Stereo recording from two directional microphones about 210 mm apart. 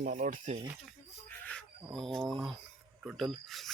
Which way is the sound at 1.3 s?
5° left (ahead or behind).